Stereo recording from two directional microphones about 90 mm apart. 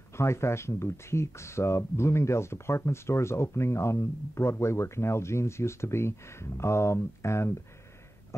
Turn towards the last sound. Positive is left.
turn(degrees=30)  # may be behind; listen again after turning